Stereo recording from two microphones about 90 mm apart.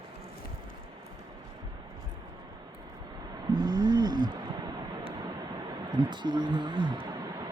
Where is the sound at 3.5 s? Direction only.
50° right (ahead or behind).